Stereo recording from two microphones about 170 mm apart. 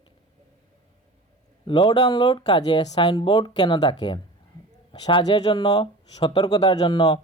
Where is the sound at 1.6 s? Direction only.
30° left (ahead or behind).